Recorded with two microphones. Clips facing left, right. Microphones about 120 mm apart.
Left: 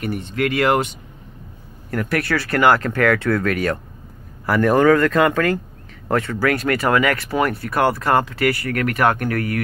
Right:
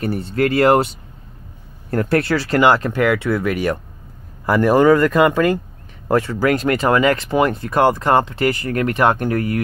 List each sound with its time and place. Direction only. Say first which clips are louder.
0.0 s speech: right 3 dB; 35° right (ahead or behind)